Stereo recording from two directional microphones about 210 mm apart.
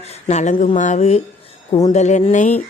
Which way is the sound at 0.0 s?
30° left (ahead or behind).